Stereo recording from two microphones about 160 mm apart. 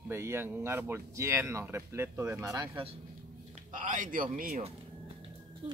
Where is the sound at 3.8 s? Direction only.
55° right (ahead or behind).